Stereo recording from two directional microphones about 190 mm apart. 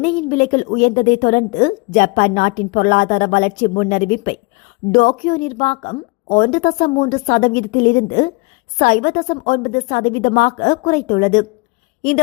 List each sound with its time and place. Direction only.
0.0 s a woman's voice: 40° left (ahead or behind)